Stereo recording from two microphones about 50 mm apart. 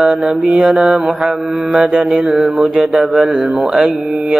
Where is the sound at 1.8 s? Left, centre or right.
Right.